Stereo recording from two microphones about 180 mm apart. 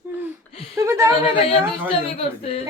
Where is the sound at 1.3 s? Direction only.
30° left (ahead or behind).